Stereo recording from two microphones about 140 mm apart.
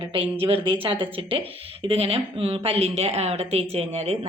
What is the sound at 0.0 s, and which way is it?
Speech, 40° right (ahead or behind).